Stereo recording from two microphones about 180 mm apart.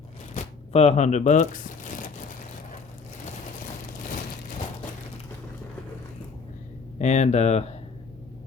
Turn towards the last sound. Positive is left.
turn(degrees=35)  # may be behind; listen again after turning